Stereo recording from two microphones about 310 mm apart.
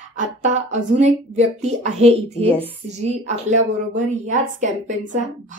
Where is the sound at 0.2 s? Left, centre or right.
Right.